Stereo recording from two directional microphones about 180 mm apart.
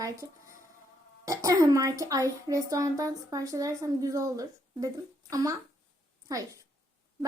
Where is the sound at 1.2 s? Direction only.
20° right (ahead or behind).